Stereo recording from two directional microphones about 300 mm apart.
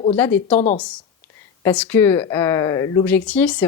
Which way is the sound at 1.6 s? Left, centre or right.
Centre.